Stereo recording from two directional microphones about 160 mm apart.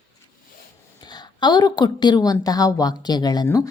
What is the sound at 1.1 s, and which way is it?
A woman's voice, 25° left (ahead or behind).